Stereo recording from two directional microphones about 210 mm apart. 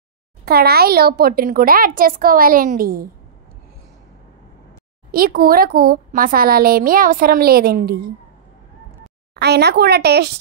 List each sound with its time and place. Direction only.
0.5 s a child's voice: 50° right (ahead or behind)
5.1 s a child's voice: 45° right (ahead or behind)
9.3 s a child's voice: 55° right (ahead or behind)